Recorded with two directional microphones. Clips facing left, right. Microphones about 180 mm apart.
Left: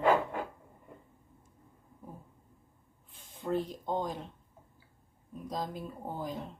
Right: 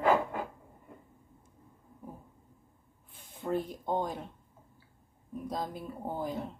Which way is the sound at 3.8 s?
10° right (ahead or behind).